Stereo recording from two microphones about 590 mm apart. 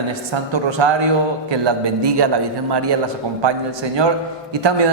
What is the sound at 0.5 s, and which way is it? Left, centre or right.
A man's voice, right.